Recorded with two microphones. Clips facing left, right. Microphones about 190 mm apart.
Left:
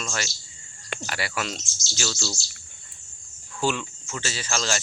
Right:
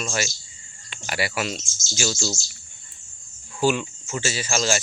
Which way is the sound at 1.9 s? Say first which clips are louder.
Right 5 dB; 20° right (ahead or behind).